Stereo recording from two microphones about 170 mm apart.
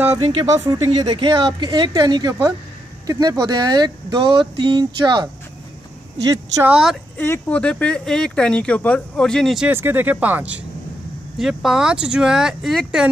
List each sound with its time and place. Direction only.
0.2 s speech: 25° right (ahead or behind)
6.3 s speech: 20° right (ahead or behind)
6.7 s speech: centre (ahead or behind)
7.2 s speech: 10° left (ahead or behind)
9.7 s speech: 10° right (ahead or behind)